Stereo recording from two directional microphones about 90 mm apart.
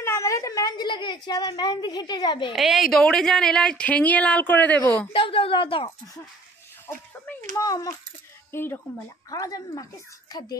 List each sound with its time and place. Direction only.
0.0 s a woman's voice: 35° left (ahead or behind); by 2.5 s 60° left (ahead or behind)
2.5 s speech: 5° right (ahead or behind); by 5.0 s 20° left (ahead or behind)
5.1 s a woman's voice: 85° left
7.5 s a woman's voice: 40° left (ahead or behind)
8.5 s speech: 25° left (ahead or behind)
9.3 s a woman's voice: 40° left (ahead or behind)